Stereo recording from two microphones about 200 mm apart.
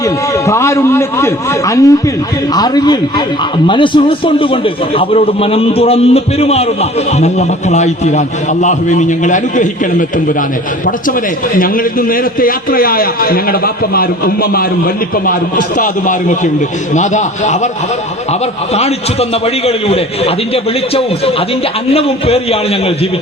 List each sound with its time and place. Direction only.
0.4 s a man's voice: 15° left (ahead or behind); by 9.6 s 40° left (ahead or behind)
11.5 s a man's voice: 45° left (ahead or behind)
15.8 s a man's voice: 40° left (ahead or behind)
19.6 s a man's voice: 30° left (ahead or behind)